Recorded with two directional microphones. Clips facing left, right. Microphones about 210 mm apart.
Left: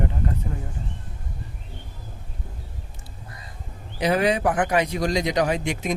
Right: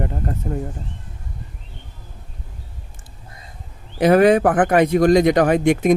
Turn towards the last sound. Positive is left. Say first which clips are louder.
# right 10 dB
turn(degrees=-55)  # may be behind; listen again after turning